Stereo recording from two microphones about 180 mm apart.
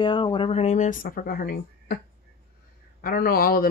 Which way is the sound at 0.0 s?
25° left (ahead or behind).